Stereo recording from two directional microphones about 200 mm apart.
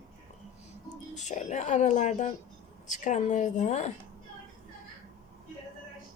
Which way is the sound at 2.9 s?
35° left (ahead or behind).